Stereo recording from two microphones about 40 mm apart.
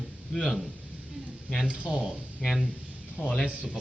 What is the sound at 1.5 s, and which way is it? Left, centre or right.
Speech, left.